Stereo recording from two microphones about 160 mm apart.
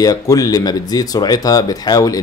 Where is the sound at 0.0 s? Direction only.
20° left (ahead or behind).